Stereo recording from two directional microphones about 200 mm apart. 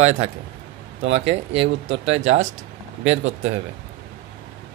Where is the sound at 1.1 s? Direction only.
30° right (ahead or behind).